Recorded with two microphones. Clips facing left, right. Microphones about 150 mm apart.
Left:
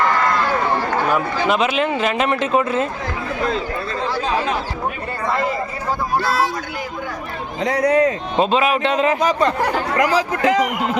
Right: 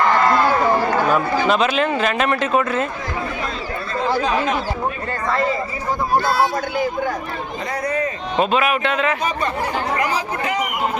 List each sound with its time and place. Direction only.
1.5 s speech: 15° left (ahead or behind)
7.6 s speech: 80° left
8.4 s speech: 25° left (ahead or behind)
9.2 s speech: 90° left